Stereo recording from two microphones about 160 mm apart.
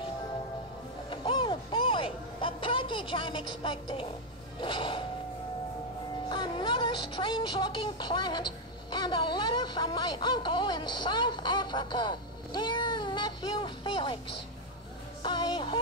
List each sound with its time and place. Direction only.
1.1 s a sound: 30° left (ahead or behind)
4.6 s music: 30° left (ahead or behind)
6.2 s music: 30° left (ahead or behind)
8.9 s speech: 30° left (ahead or behind)
15.2 s music: 30° left (ahead or behind)